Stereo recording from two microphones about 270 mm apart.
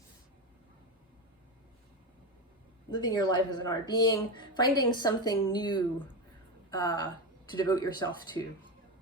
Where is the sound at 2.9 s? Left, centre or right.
Centre.